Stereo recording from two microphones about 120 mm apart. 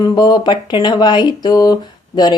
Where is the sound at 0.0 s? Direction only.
35° left (ahead or behind).